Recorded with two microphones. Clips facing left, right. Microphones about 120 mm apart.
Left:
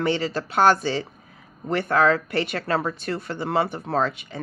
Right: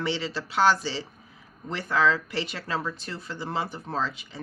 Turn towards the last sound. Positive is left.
turn(degrees=60)  # may be behind; listen again after turning